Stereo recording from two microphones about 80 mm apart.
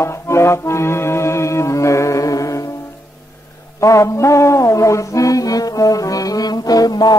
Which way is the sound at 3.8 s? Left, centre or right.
Left.